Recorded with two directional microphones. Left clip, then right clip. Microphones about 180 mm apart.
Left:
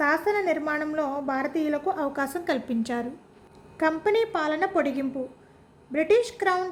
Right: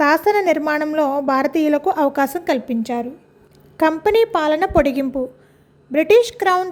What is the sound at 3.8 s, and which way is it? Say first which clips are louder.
A woman's voice: right 8 dB; 45° right (ahead or behind).